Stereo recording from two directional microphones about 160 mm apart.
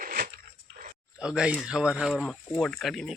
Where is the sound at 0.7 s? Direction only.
65° right (ahead or behind).